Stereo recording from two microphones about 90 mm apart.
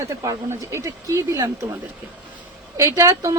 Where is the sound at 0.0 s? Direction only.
35° right (ahead or behind).